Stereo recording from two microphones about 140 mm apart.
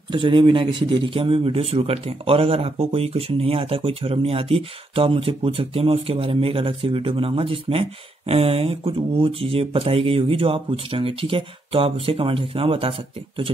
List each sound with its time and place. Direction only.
0.1 s a man's voice: 35° right (ahead or behind)